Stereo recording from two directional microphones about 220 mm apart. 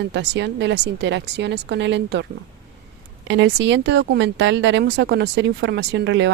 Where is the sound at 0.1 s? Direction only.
50° right (ahead or behind).